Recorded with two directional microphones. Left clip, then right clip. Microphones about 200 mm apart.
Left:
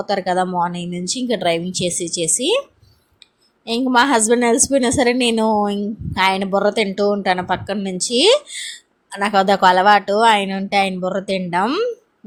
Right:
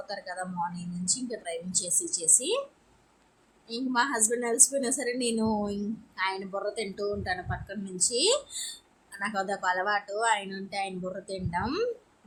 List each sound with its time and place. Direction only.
0.0 s a woman's voice: 35° left (ahead or behind)
3.7 s a woman's voice: 40° left (ahead or behind)